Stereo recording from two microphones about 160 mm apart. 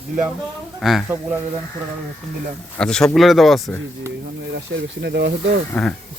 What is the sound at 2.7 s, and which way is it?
Speech, 5° left (ahead or behind).